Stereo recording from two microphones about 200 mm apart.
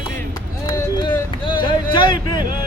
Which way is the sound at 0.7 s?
20° left (ahead or behind).